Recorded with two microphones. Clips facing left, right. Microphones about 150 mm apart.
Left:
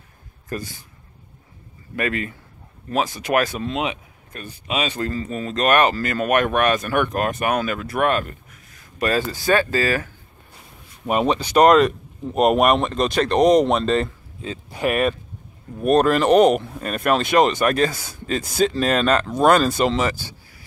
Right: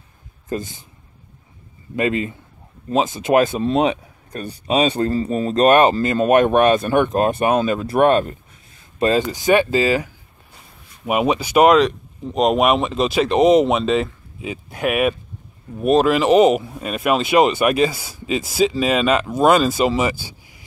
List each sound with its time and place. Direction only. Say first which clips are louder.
0.5 s speech: right 4 dB; 20° right (ahead or behind)
2.0 s speech: right 4 dB; 25° right (ahead or behind)
3.6 s speech: right 7 dB; 35° right (ahead or behind); by 20.6 s 15° right (ahead or behind)